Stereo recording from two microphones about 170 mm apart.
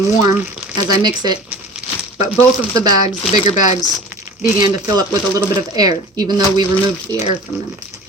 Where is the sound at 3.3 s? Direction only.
45° left (ahead or behind).